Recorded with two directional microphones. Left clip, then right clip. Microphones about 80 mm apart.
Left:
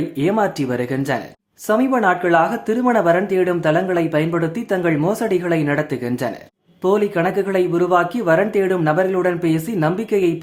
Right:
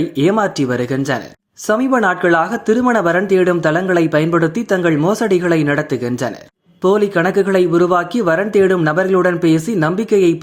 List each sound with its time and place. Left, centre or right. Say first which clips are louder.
0.2 s speech: right 3 dB; right
1.6 s speech: right 2 dB; right